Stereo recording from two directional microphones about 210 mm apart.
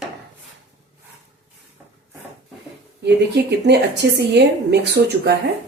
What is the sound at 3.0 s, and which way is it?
A woman's voice, 55° right (ahead or behind).